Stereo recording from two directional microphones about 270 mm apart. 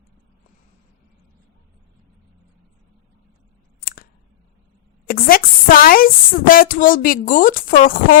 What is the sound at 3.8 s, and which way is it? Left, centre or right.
Scissors, left.